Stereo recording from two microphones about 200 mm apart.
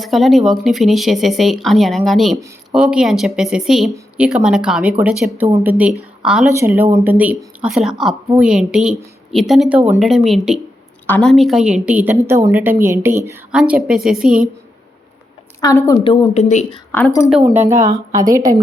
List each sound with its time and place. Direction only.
0.0 s speech: centre (ahead or behind)
15.6 s a woman's voice: 15° left (ahead or behind)
16.3 s speech: 35° left (ahead or behind)
16.9 s a woman's voice: 10° left (ahead or behind)
17.4 s speech: 10° right (ahead or behind)
17.7 s speech: 40° right (ahead or behind)
18.2 s speech: 15° right (ahead or behind)